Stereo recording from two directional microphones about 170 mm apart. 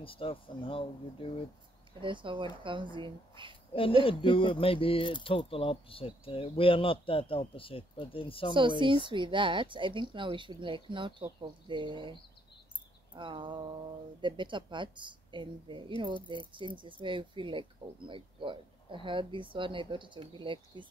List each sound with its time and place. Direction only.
0.0 s speech: 30° left (ahead or behind)
2.0 s speech: 30° right (ahead or behind)
3.7 s speech: 30° left (ahead or behind)
8.5 s speech: 30° right (ahead or behind)